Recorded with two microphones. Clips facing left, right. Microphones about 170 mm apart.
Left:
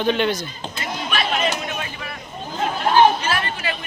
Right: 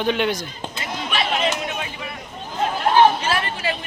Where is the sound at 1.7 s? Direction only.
15° right (ahead or behind).